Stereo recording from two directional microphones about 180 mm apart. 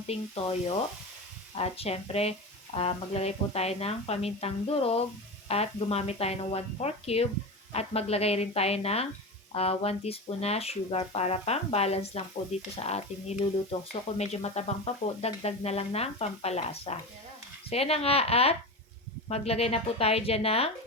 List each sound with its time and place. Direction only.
0.1 s speech: 35° left (ahead or behind)